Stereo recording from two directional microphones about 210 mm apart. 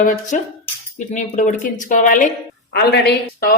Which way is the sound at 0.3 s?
40° left (ahead or behind).